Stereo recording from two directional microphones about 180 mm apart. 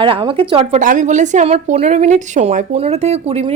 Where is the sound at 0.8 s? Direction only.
45° right (ahead or behind).